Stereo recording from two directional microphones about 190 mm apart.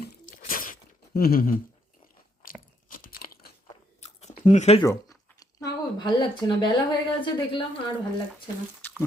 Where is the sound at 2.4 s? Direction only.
45° left (ahead or behind).